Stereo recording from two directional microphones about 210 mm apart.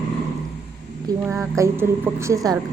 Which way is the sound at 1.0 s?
10° right (ahead or behind).